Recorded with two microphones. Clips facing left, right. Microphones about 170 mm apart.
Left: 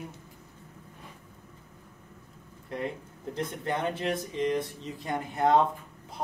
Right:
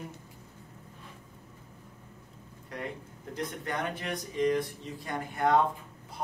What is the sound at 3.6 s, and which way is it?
Speech, 25° left (ahead or behind).